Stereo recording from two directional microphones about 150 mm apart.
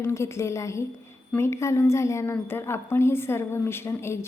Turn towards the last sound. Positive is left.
turn(degrees=20)  # may be behind; listen again after turning